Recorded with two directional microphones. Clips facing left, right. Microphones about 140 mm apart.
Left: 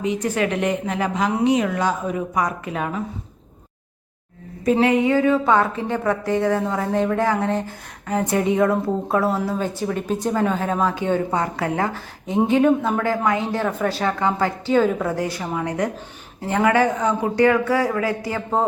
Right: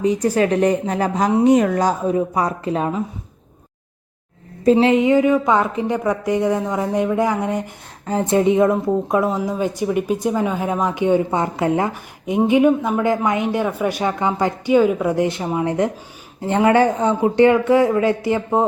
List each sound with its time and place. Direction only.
0.0 s a woman's voice: 35° right (ahead or behind)
4.6 s speech: 25° right (ahead or behind)
8.0 s speech: 25° right (ahead or behind); by 15.1 s 10° right (ahead or behind)
15.1 s speech: 20° right (ahead or behind)